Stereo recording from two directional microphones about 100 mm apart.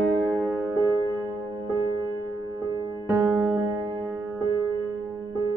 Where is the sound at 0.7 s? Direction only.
35° right (ahead or behind).